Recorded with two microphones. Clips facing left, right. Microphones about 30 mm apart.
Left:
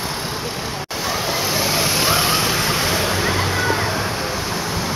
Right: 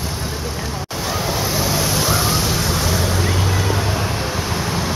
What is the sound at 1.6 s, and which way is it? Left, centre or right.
Vehicle, left.